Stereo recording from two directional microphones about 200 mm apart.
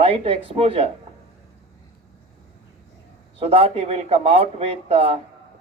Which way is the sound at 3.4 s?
30° right (ahead or behind).